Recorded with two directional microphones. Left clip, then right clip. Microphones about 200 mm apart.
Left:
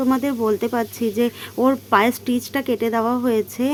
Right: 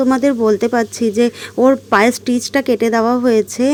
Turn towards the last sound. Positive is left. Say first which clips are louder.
# right 7 dB
turn(degrees=-25)  # may be behind; listen again after turning